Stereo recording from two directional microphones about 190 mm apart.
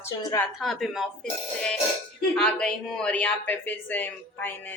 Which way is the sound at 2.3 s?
5° left (ahead or behind).